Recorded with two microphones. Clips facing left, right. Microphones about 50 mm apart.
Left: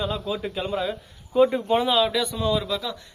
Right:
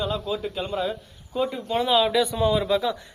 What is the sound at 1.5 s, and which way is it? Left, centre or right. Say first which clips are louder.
Speech: left 4 dB; left.